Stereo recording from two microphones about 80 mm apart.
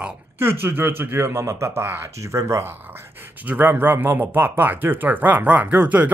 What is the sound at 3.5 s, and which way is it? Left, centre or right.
Speech, right.